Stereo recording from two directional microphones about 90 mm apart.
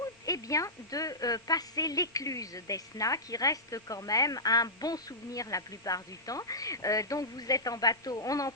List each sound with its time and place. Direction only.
0.3 s a woman's voice: 40° left (ahead or behind)